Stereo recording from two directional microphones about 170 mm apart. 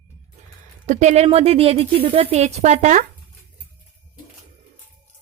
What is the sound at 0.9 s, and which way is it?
A woman's voice, 45° right (ahead or behind).